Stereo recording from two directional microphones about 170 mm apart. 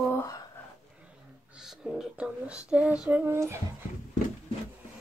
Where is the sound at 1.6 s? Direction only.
5° right (ahead or behind).